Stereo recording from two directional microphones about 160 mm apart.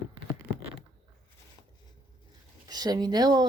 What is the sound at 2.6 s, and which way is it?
Speech, 25° right (ahead or behind).